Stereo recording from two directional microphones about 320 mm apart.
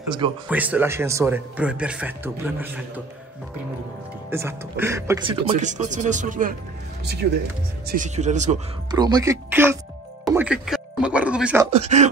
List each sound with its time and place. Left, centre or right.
0.5 s speech: centre
4.3 s speech: centre
10.2 s music: centre
11.7 s speech: right